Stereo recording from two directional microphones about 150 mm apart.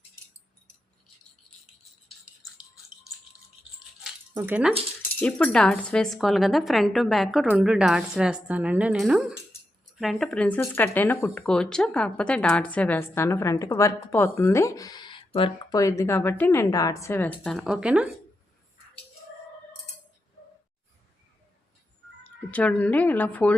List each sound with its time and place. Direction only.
4.4 s speech: 10° right (ahead or behind)
5.2 s speech: 5° left (ahead or behind); by 15.5 s 35° left (ahead or behind)
15.7 s speech: 20° left (ahead or behind); by 18.1 s 5° right (ahead or behind)
22.5 s speech: 10° left (ahead or behind)